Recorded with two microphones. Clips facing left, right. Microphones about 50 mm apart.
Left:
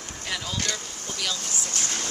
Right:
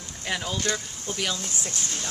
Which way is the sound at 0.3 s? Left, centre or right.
Right.